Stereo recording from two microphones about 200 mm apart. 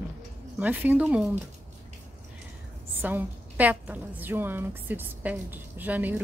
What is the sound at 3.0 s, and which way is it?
A woman's voice, 10° right (ahead or behind).